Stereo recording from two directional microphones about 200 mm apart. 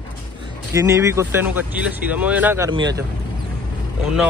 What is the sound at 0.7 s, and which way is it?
Speech, 15° right (ahead or behind).